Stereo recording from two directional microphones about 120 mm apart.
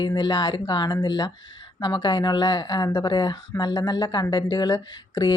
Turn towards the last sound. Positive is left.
turn(degrees=35)  # may be behind; listen again after turning